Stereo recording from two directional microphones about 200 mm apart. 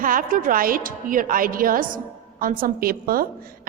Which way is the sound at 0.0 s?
45° right (ahead or behind).